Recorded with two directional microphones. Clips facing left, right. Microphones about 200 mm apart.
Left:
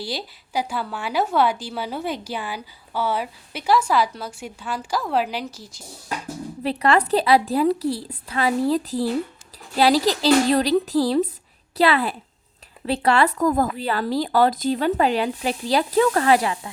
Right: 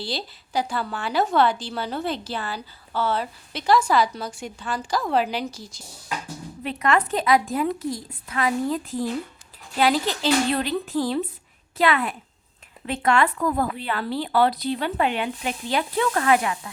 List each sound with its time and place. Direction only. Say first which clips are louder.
0.0 s a woman's voice: left 1 dB; 10° left (ahead or behind)
6.6 s speech: left 3 dB; 35° left (ahead or behind)